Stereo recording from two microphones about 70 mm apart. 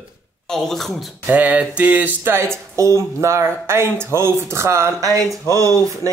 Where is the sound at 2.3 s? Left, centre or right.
Right.